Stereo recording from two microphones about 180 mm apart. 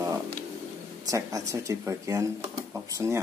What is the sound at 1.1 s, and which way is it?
Speech, 20° right (ahead or behind).